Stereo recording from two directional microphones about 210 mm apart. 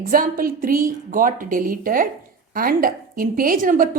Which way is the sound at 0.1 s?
45° right (ahead or behind).